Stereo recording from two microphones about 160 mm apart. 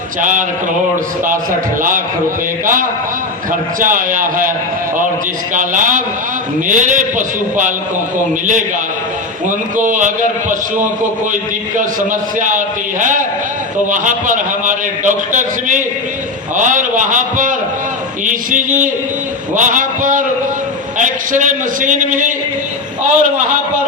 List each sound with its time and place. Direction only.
0.2 s a man's voice: 55° right (ahead or behind)
3.8 s a man's voice: 55° right (ahead or behind)
5.5 s a man's voice: 55° right (ahead or behind)
9.5 s a man's voice: 55° right (ahead or behind)